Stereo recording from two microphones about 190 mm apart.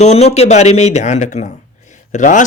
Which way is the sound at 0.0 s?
35° left (ahead or behind).